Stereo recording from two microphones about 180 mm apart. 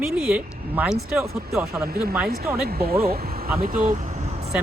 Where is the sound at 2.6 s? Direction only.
60° right (ahead or behind).